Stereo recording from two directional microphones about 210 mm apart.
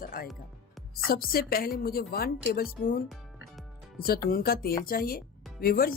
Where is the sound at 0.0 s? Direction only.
45° left (ahead or behind).